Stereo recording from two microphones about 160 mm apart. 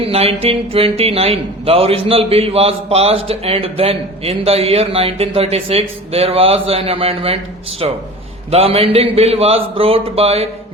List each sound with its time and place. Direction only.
0.0 s speech: 35° right (ahead or behind)
8.4 s speech: 40° right (ahead or behind)